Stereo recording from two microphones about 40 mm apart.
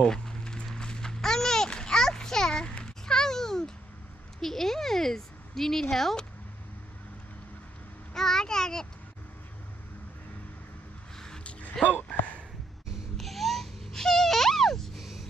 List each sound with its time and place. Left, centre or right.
0.0 s a sound: centre
0.7 s music: centre
1.7 s a sound: centre
4.4 s speech: centre
8.1 s a child's voice: centre
11.1 s a sound: centre
11.7 s speech: centre
13.2 s wail: centre
15.0 s gasp: centre